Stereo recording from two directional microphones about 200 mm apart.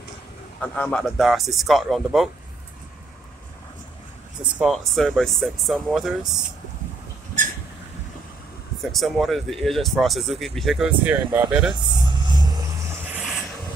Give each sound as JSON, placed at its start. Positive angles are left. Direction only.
{"t": 0.6, "sound": "speech", "side_deg": 5}
{"t": 4.6, "sound": "speech", "side_deg": 0}
{"t": 7.4, "sound": "a sound", "side_deg": -40}
{"t": 8.9, "sound": "speech", "side_deg": 0}
{"t": 11.8, "sound": "vehicle", "side_deg": -20}